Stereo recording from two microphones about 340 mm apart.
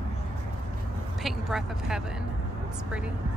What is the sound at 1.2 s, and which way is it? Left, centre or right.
A woman's voice, centre.